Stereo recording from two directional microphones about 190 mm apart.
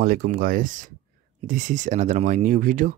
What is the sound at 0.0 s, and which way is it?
Speech, 50° right (ahead or behind).